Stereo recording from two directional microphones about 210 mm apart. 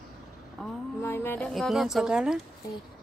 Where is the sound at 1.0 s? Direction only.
10° left (ahead or behind).